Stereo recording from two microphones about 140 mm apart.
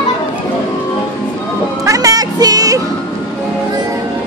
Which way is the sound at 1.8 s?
25° right (ahead or behind).